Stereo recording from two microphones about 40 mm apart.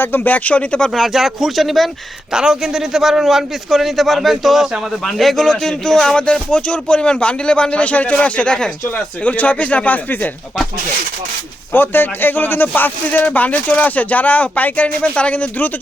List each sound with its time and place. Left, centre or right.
0.0 s speech: left
0.3 s speech: left
0.9 s speech: centre
2.3 s a man's voice: centre
6.5 s speech: left
8.4 s speech: left
9.2 s speech: left
11.7 s speech: left